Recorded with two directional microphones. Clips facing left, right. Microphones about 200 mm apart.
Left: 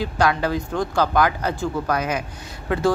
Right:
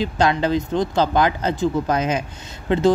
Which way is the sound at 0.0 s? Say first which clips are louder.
Right 2 dB; 20° right (ahead or behind).